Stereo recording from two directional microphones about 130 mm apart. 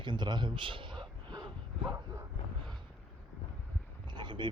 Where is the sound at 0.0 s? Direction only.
35° right (ahead or behind).